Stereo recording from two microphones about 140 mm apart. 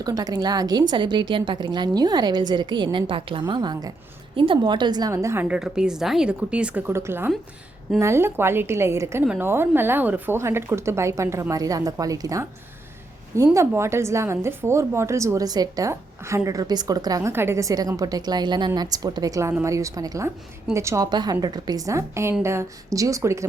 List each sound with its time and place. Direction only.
0.0 s a woman's voice: 25° right (ahead or behind)